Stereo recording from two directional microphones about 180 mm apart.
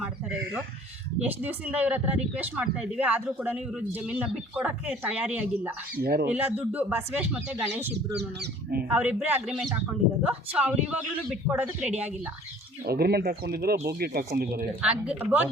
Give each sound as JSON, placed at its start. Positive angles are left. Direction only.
{"t": 1.2, "sound": "a man's voice", "side_deg": -10}
{"t": 6.0, "sound": "speech", "side_deg": -60}
{"t": 6.2, "sound": "a man's voice", "side_deg": -10}
{"t": 8.1, "sound": "speech", "side_deg": -65}
{"t": 8.9, "sound": "a man's voice", "side_deg": -5}
{"t": 12.8, "sound": "speech", "side_deg": -60}
{"t": 14.8, "sound": "a man's voice", "side_deg": -5}